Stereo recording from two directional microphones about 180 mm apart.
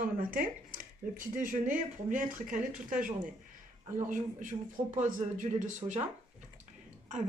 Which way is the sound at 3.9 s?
45° right (ahead or behind).